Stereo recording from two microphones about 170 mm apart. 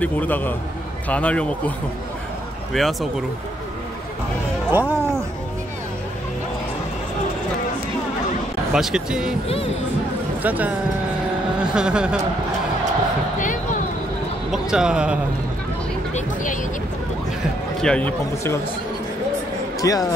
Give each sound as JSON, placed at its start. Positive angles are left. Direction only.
{"t": 0.0, "sound": "speech", "side_deg": 10}
{"t": 2.7, "sound": "speech", "side_deg": 0}
{"t": 4.6, "sound": "music", "side_deg": -10}
{"t": 8.7, "sound": "speech", "side_deg": -5}
{"t": 10.4, "sound": "speech", "side_deg": -10}
{"t": 11.7, "sound": "speech", "side_deg": -5}
{"t": 13.4, "sound": "a sound", "side_deg": 50}
{"t": 14.5, "sound": "a man's voice", "side_deg": -5}
{"t": 17.8, "sound": "speech", "side_deg": 10}
{"t": 19.8, "sound": "speech", "side_deg": 20}